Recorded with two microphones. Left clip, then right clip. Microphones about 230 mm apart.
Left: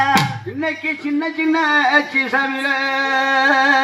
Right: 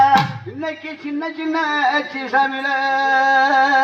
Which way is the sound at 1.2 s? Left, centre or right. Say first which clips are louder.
Left 3 dB; left.